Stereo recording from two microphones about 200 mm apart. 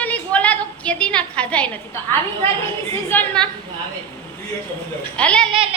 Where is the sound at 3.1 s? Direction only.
5° left (ahead or behind).